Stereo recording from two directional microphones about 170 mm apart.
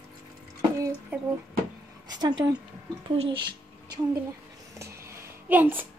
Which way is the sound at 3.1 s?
30° right (ahead or behind).